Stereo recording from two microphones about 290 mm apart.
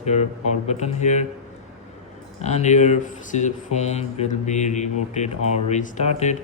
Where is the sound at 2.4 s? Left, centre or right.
Left.